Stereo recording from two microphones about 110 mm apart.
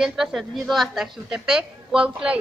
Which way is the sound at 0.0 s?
5° right (ahead or behind).